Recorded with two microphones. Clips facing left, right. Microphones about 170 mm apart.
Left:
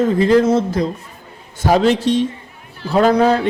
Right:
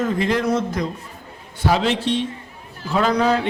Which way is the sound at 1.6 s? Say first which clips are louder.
Left 6 dB; 45° left (ahead or behind).